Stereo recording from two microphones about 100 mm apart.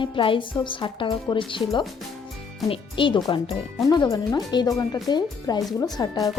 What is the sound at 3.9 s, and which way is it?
A woman's voice, 40° left (ahead or behind).